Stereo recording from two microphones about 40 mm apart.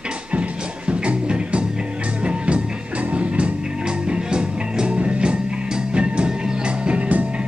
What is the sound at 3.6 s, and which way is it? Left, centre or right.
Music, centre.